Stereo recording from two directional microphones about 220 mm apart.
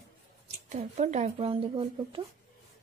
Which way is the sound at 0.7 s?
30° right (ahead or behind).